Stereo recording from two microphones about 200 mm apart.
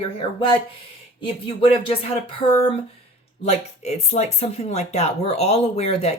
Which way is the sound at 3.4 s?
30° left (ahead or behind).